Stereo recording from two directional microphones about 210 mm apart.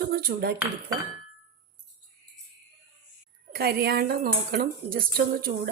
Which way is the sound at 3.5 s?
50° right (ahead or behind).